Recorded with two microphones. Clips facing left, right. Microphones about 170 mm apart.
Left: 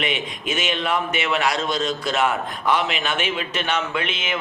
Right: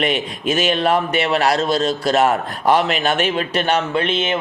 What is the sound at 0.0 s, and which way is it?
A man's voice, 35° right (ahead or behind).